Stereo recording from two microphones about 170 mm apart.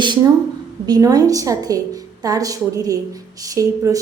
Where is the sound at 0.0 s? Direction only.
25° right (ahead or behind).